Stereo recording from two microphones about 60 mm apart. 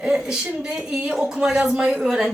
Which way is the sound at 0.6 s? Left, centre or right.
Centre.